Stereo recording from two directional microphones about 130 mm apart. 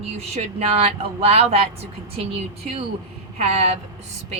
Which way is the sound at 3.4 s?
55° right (ahead or behind).